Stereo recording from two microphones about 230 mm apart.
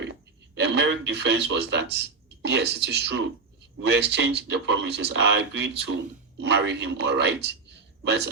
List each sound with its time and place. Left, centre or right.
0.0 s a man's voice: right